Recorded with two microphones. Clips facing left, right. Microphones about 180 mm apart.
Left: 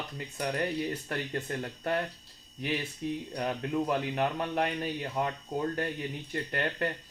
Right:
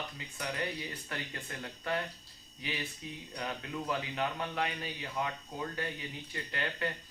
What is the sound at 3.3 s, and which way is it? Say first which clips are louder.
Speech: left 6 dB; 45° left (ahead or behind).